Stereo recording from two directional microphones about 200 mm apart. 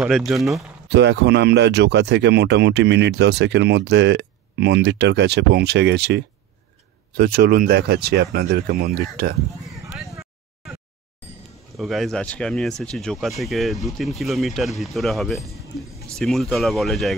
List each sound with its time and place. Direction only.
0.0 s speech: centre (ahead or behind)
0.8 s speech: 60° right (ahead or behind)
11.7 s speech: centre (ahead or behind)